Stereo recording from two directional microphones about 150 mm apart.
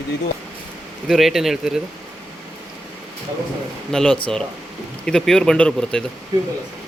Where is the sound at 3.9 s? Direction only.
5° left (ahead or behind).